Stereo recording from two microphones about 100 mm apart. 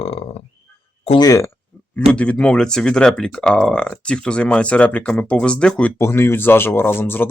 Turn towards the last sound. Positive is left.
turn(degrees=20)  # may be behind; listen again after turning